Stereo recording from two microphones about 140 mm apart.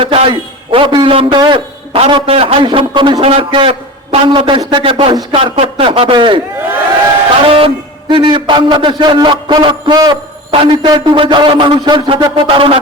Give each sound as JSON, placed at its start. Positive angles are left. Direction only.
{"t": 0.0, "sound": "a man's voice", "side_deg": -40}
{"t": 7.4, "sound": "a man's voice", "side_deg": -40}